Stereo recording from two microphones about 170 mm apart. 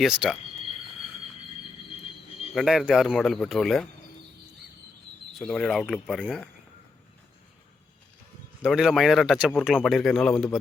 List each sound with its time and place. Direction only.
0.0 s speech: 5° right (ahead or behind)
2.6 s speech: centre (ahead or behind)
5.3 s speech: 5° left (ahead or behind)
8.6 s speech: centre (ahead or behind)